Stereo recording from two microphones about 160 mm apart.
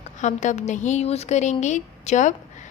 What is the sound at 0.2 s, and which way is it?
A woman's voice, 50° left (ahead or behind).